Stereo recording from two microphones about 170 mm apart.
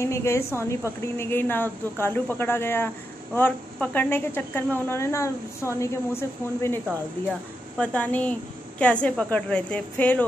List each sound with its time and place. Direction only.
0.0 s a woman's voice: 15° left (ahead or behind)